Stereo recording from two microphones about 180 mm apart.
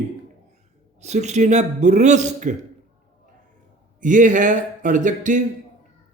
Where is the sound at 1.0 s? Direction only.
40° right (ahead or behind).